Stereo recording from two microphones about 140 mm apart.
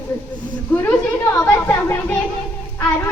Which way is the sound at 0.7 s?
10° left (ahead or behind).